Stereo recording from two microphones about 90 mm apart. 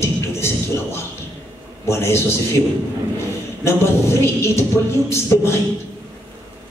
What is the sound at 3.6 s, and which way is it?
A woman's voice, 30° left (ahead or behind).